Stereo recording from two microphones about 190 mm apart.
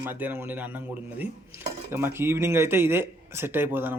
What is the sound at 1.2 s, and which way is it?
A man's voice, 10° right (ahead or behind).